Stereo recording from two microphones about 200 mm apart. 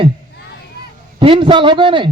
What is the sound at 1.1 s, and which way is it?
Speech, 25° right (ahead or behind).